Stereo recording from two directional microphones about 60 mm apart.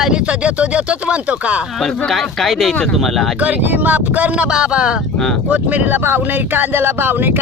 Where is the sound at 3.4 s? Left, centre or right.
Right.